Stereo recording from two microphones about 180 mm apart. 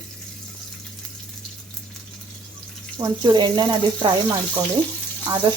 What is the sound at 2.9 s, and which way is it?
Speech, 25° right (ahead or behind).